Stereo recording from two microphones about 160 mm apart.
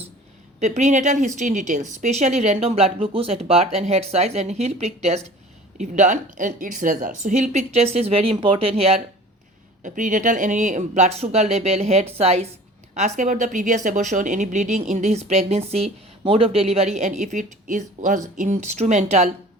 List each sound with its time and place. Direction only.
0.6 s speech: 45° right (ahead or behind)
9.8 s a woman's voice: 55° right (ahead or behind)